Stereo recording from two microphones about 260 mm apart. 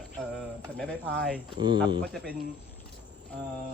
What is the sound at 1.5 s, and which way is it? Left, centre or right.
Speech, centre.